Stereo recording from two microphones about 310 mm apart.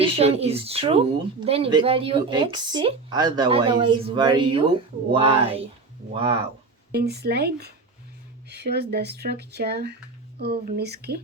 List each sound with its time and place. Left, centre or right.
0.0 s speech: centre
6.9 s speech: right